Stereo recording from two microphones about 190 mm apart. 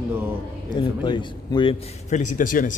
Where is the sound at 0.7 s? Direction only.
25° left (ahead or behind).